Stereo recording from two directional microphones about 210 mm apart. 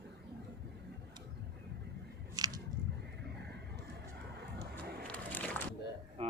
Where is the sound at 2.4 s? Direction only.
20° right (ahead or behind).